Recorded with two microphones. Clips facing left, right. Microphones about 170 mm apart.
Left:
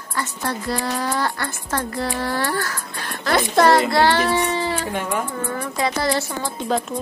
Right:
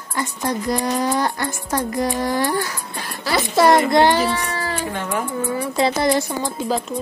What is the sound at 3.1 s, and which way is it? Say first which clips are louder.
Speech: left 2 dB; centre (ahead or behind).